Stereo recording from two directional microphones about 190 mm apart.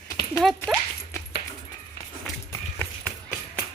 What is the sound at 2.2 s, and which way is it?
Run, 15° left (ahead or behind).